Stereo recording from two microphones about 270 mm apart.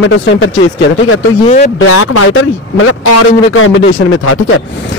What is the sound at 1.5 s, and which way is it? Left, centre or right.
Speech, left.